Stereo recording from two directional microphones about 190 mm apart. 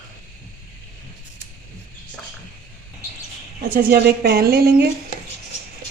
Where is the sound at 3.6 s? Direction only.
50° right (ahead or behind).